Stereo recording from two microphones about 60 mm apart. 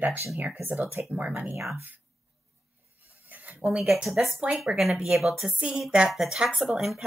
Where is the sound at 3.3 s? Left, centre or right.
Right.